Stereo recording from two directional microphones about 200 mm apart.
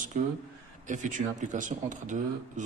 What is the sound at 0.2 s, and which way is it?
Speech, 40° right (ahead or behind).